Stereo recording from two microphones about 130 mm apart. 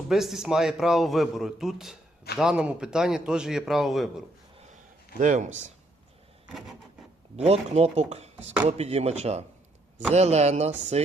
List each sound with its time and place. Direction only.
0.1 s a man's voice: 5° right (ahead or behind)
5.2 s speech: 75° right (ahead or behind)
7.3 s speech: 55° right (ahead or behind)